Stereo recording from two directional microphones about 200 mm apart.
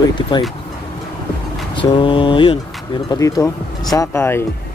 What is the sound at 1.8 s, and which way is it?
Speech, 25° left (ahead or behind).